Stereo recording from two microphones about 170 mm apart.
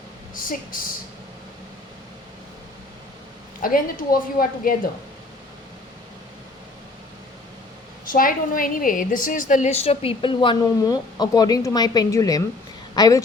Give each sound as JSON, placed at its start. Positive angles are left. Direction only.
{"t": 0.3, "sound": "a woman's voice", "side_deg": 55}
{"t": 3.6, "sound": "a woman's voice", "side_deg": 55}
{"t": 8.1, "sound": "a woman's voice", "side_deg": 55}